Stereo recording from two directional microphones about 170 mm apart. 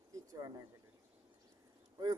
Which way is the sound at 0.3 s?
20° right (ahead or behind).